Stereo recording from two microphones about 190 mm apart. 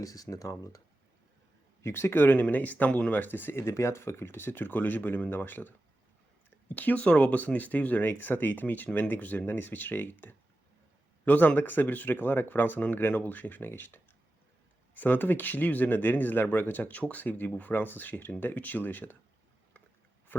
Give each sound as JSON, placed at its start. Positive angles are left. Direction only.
{"t": 0.0, "sound": "speech", "side_deg": 20}
{"t": 1.8, "sound": "speech", "side_deg": 10}